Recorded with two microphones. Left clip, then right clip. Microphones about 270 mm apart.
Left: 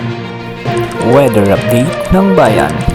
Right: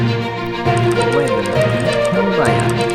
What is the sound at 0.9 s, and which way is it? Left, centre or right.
Music, centre.